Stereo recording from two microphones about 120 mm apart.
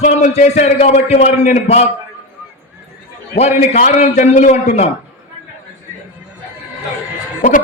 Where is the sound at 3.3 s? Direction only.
65° left (ahead or behind).